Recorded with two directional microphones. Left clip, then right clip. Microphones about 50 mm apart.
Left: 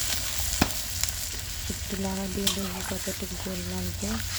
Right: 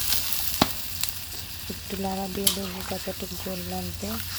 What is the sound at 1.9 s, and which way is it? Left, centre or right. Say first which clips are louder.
Speech: right 4 dB; centre.